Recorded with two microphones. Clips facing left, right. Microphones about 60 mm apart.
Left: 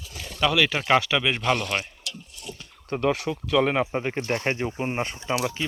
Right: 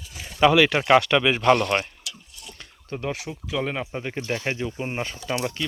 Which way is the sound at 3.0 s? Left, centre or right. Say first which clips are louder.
Left 7 dB; left.